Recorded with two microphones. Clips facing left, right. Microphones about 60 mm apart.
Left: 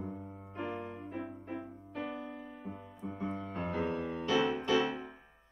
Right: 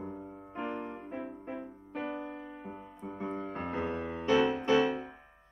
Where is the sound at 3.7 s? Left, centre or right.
Centre.